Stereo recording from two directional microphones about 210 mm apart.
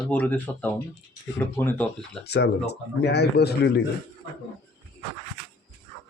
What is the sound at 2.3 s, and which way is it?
Speech, 50° left (ahead or behind).